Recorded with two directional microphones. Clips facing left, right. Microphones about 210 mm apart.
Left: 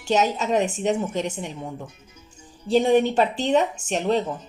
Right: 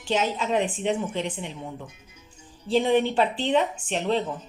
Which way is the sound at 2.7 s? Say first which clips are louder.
Left 3 dB; 45° left (ahead or behind).